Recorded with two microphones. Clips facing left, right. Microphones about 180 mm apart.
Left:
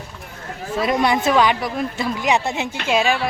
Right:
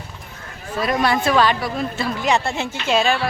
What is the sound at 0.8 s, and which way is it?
A woman's voice, 20° left (ahead or behind).